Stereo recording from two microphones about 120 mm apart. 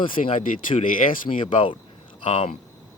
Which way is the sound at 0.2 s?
70° left (ahead or behind).